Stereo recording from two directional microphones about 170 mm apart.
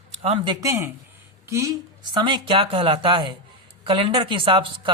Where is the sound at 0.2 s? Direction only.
35° right (ahead or behind); by 1.7 s 15° right (ahead or behind).